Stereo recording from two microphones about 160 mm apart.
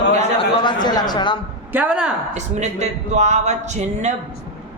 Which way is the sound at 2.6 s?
45° right (ahead or behind).